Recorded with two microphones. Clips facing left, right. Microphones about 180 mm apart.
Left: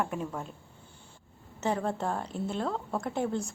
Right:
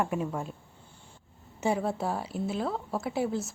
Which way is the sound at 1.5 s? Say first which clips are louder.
Right 2 dB; 10° right (ahead or behind).